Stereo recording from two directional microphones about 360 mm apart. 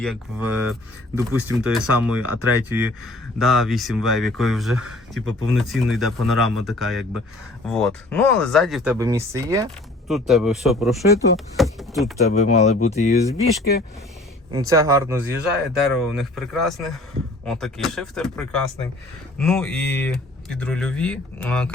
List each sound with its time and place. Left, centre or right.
0.0 s speech: centre
12.2 s speech: centre
14.5 s speech: centre